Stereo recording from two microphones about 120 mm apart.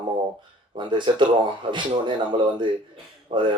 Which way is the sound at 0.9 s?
40° right (ahead or behind).